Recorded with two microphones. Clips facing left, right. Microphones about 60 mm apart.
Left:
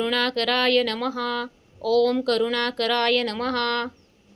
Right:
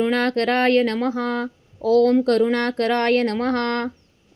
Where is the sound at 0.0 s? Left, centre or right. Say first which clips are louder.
Right 4 dB; right.